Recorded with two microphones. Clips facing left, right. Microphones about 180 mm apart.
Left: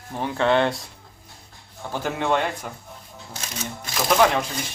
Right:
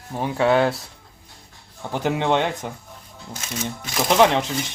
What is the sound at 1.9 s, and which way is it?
Speech, 20° right (ahead or behind).